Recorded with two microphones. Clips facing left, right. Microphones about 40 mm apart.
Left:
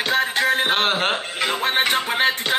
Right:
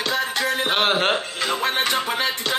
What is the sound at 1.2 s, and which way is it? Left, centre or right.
Music, left.